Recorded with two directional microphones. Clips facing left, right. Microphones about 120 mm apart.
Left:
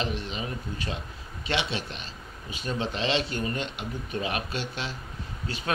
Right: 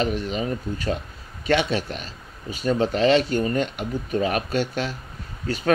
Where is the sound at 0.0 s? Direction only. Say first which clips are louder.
Right 7 dB; 45° right (ahead or behind).